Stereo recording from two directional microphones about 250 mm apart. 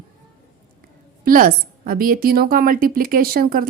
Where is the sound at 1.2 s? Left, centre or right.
Right.